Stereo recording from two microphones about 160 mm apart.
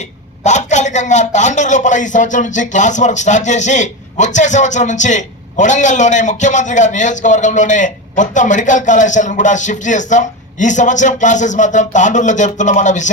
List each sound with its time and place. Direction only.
0.4 s a man's voice: 45° left (ahead or behind)